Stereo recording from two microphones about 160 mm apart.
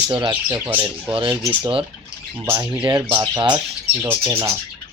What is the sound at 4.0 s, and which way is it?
Speech, 15° right (ahead or behind).